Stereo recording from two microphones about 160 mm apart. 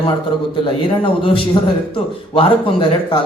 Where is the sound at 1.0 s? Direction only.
35° left (ahead or behind).